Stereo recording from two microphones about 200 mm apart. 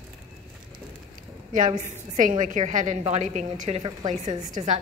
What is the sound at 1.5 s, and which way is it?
A woman's voice, 35° right (ahead or behind).